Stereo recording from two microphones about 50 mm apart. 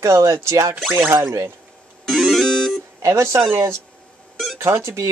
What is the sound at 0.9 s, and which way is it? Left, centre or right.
Speech, right.